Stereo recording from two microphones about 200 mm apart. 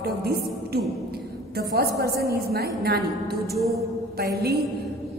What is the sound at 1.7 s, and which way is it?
A woman's voice, 50° right (ahead or behind).